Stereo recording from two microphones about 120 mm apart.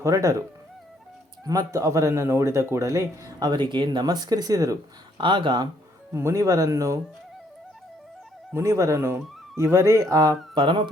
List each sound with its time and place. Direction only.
0.0 s speech: 25° right (ahead or behind)
1.5 s speech: 30° right (ahead or behind)
3.4 s speech: 40° right (ahead or behind)
5.1 s speech: 45° right (ahead or behind)
6.1 s speech: 25° right (ahead or behind)
8.5 s speech: 25° right (ahead or behind); by 10.8 s 45° right (ahead or behind)